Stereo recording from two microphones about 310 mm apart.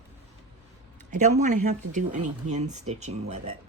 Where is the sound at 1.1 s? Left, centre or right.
Right.